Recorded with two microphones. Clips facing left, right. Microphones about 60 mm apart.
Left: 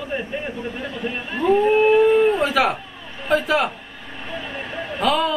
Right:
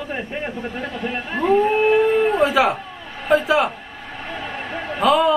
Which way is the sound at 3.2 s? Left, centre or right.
Centre.